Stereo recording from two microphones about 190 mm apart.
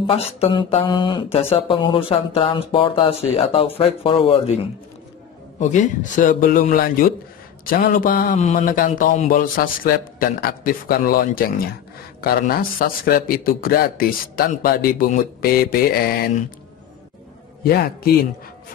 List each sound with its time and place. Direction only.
0.0 s speech: 30° left (ahead or behind)
5.6 s speech: 40° left (ahead or behind)